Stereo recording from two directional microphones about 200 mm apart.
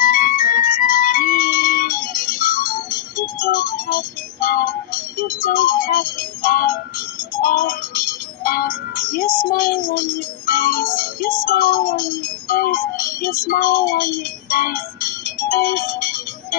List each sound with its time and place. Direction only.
0.0 s music: 45° left (ahead or behind)